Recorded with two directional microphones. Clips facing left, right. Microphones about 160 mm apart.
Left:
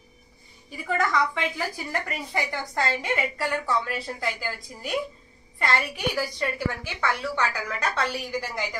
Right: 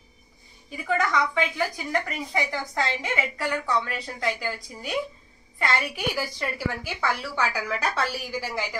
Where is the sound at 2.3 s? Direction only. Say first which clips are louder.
Right 1 dB; centre (ahead or behind).